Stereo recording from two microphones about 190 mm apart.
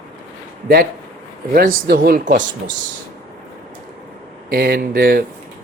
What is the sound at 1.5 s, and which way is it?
Speech, 50° right (ahead or behind).